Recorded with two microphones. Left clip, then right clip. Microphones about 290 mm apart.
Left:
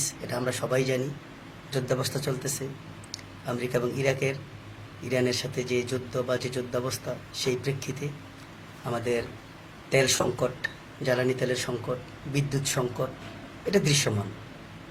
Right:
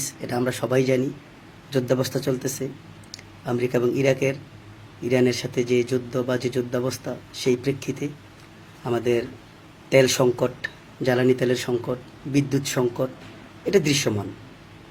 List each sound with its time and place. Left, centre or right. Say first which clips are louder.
0.0 s a man's voice: right 4 dB; right